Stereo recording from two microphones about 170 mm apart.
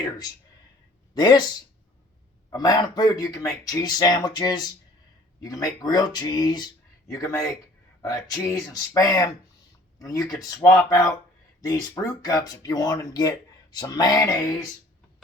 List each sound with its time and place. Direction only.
1.1 s speech: 25° left (ahead or behind)
2.5 s speech: 20° left (ahead or behind)
12.2 s speech: 20° left (ahead or behind)